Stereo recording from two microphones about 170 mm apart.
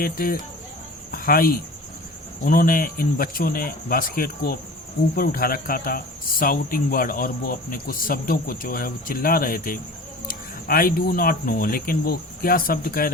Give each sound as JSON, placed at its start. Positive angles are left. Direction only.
{"t": 0.0, "sound": "speech", "side_deg": 60}